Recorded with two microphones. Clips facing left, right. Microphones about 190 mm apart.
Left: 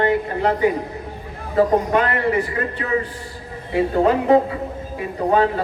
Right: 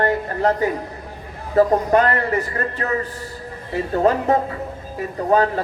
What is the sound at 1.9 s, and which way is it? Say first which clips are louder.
A man's voice: right 1 dB; 45° right (ahead or behind).